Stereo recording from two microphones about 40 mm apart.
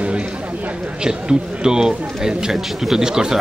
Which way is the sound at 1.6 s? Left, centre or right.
Centre.